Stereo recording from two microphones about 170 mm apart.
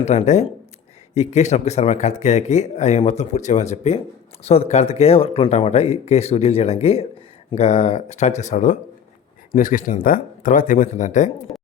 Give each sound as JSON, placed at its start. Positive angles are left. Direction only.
{"t": 0.0, "sound": "speech", "side_deg": 40}